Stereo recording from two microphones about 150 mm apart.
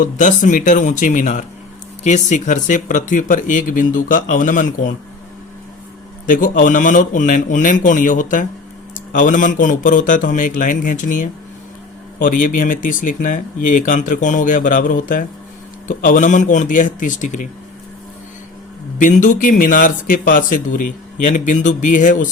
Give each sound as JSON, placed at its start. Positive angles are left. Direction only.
{"t": 0.0, "sound": "speech", "side_deg": 60}
{"t": 6.2, "sound": "speech", "side_deg": 65}
{"t": 18.9, "sound": "speech", "side_deg": 60}